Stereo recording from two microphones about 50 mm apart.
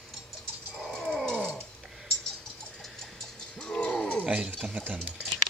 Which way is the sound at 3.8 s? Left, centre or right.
Left.